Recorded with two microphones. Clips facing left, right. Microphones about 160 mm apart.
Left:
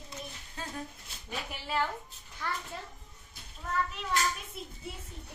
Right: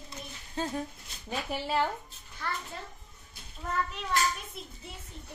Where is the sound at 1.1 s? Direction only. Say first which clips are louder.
Even; 5° left (ahead or behind).